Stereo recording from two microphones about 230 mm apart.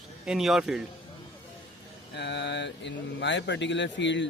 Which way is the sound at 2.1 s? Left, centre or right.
Left.